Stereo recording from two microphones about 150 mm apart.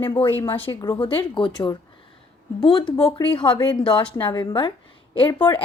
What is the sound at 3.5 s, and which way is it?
A woman's voice, 25° left (ahead or behind).